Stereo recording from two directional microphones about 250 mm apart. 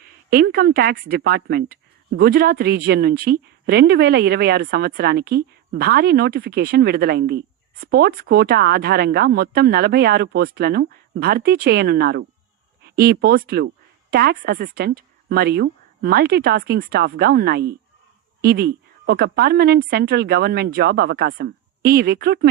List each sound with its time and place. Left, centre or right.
0.3 s speech: right